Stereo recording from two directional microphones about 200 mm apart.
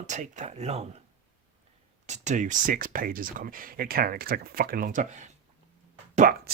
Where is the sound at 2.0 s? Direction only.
35° right (ahead or behind).